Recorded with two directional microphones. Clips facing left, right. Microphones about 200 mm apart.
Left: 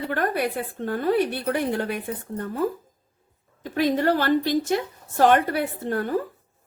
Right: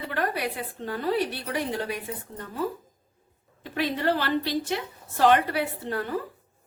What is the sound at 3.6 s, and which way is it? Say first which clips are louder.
A woman's voice: left 6 dB; 45° left (ahead or behind).